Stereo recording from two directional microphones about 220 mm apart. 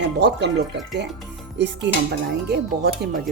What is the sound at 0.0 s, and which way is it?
Speech, 50° right (ahead or behind).